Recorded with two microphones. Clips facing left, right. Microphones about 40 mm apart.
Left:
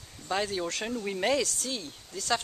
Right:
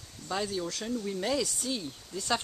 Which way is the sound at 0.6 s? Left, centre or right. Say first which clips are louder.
Left 1 dB; left.